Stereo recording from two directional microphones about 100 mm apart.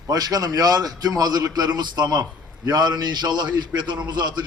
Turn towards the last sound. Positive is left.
turn(degrees=-45)  # may be behind; listen again after turning